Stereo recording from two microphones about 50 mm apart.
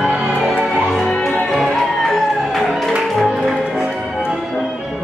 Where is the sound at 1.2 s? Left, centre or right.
Centre.